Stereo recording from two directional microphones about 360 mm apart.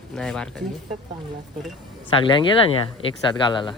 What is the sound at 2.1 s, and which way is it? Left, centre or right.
Speech, centre.